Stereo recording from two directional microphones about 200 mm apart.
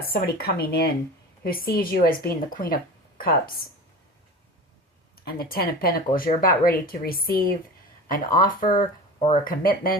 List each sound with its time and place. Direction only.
0.0 s speech: 50° left (ahead or behind)
5.2 s speech: 50° left (ahead or behind); by 9.4 s 30° left (ahead or behind)
9.4 s speech: 45° left (ahead or behind)